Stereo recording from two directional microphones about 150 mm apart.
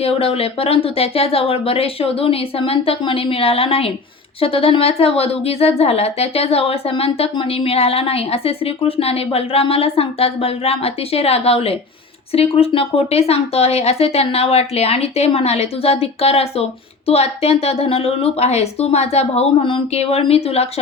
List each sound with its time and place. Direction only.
0.0 s a woman's voice: 40° left (ahead or behind)